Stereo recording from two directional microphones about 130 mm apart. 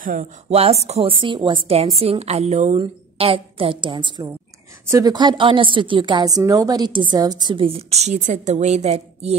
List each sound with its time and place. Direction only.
0.0 s speech: 90° right
0.5 s a woman's voice: 50° right (ahead or behind)
1.2 s a woman's voice: 40° right (ahead or behind)
2.0 s a woman's voice: 50° right (ahead or behind)
2.8 s a woman's voice: 45° right (ahead or behind)
4.8 s a woman's voice: 25° right (ahead or behind); by 9.4 s 55° right (ahead or behind)